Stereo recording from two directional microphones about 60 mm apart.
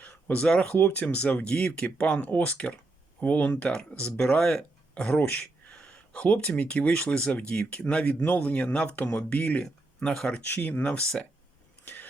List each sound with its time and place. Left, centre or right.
0.0 s speech: left
9.6 s speech: centre
10.4 s speech: left